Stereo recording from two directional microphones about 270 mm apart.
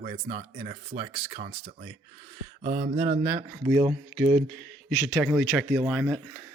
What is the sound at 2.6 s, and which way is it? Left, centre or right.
Mantra, right.